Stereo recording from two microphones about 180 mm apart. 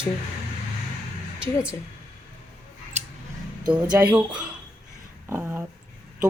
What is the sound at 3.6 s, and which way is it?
Speech, 5° right (ahead or behind).